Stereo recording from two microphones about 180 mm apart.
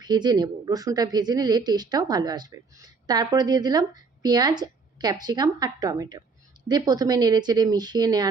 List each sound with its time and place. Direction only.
0.0 s a woman's voice: 20° right (ahead or behind)